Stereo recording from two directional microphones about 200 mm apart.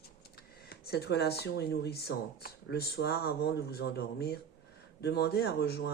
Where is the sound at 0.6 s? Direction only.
50° left (ahead or behind).